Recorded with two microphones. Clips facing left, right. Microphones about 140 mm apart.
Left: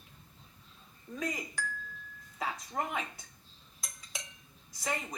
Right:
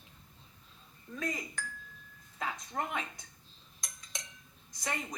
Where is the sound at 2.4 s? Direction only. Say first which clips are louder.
Left 1 dB; 5° left (ahead or behind).